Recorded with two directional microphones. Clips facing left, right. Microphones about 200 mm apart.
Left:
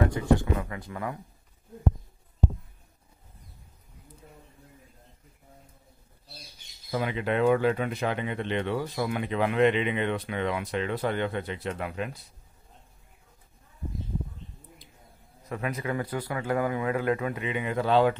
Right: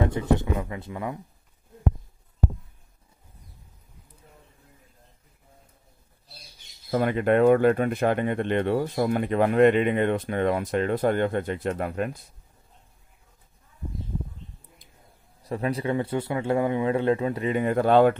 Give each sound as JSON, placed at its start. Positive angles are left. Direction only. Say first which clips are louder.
{"t": 0.1, "sound": "speech", "louder": "even", "side_deg": -20}
{"t": 6.9, "sound": "speech", "louder": "right 7 dB", "side_deg": -50}
{"t": 15.4, "sound": "speech", "louder": "right 5 dB", "side_deg": -35}